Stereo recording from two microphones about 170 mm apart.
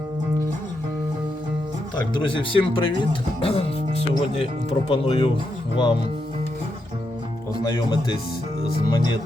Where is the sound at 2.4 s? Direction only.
30° left (ahead or behind).